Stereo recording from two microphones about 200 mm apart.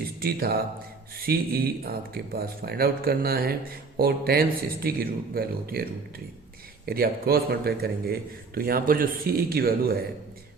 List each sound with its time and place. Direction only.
0.2 s speech: 50° right (ahead or behind)